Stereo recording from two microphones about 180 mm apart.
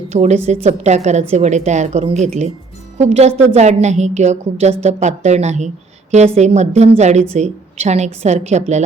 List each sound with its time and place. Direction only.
0.1 s a woman's voice: 40° right (ahead or behind)